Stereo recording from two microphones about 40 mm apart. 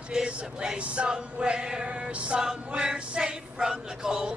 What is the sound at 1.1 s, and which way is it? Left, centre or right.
Male singing, right.